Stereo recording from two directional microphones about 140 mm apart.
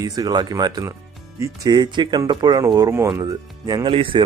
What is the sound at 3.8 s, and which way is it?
Speech, 40° right (ahead or behind).